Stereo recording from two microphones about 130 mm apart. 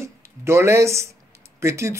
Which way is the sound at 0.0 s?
20° right (ahead or behind).